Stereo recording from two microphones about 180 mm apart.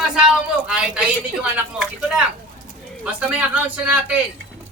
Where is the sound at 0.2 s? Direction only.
5° right (ahead or behind).